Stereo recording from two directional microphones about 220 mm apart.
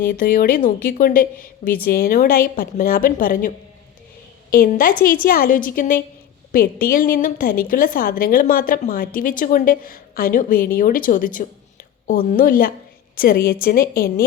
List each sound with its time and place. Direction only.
0.0 s a woman's voice: 45° left (ahead or behind)
4.5 s a woman's voice: 40° left (ahead or behind)